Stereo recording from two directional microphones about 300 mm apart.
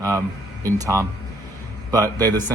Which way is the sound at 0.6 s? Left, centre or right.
Centre.